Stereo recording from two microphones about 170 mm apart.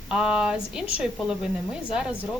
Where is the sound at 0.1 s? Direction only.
5° right (ahead or behind).